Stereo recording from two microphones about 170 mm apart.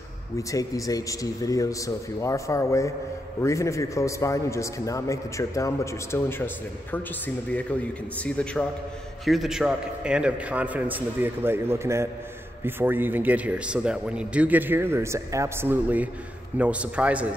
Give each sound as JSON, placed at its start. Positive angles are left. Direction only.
{"t": 0.4, "sound": "a man's voice", "side_deg": 20}
{"t": 8.2, "sound": "a man's voice", "side_deg": 5}